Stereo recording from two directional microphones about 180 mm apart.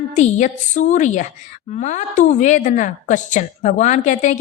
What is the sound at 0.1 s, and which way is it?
A woman's voice, 40° left (ahead or behind).